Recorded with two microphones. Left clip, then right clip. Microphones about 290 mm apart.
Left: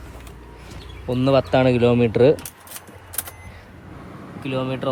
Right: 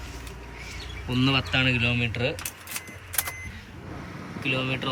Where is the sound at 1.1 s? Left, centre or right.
Centre.